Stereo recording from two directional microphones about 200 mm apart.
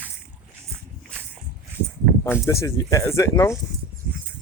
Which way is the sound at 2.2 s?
15° left (ahead or behind).